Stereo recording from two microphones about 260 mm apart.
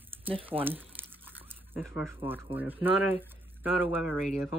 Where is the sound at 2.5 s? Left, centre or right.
Centre.